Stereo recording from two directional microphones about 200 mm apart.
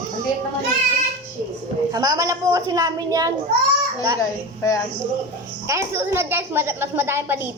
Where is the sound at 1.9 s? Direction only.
20° right (ahead or behind).